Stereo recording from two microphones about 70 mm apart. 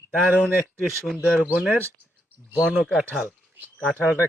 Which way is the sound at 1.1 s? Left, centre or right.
Centre.